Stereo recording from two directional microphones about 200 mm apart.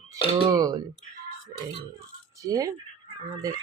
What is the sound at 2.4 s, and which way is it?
Speech, 15° right (ahead or behind).